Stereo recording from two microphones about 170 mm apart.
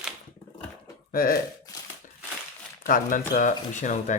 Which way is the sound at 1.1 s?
60° left (ahead or behind).